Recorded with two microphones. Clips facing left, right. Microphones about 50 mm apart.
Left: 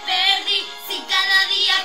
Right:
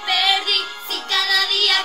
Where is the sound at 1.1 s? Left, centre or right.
Centre.